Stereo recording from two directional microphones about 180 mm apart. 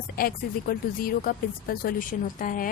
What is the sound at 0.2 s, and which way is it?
Speech, 55° left (ahead or behind).